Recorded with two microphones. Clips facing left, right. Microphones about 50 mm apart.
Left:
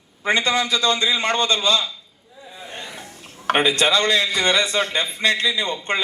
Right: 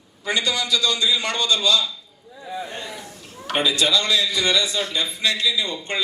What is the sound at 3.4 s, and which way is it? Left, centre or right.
A man's voice, left.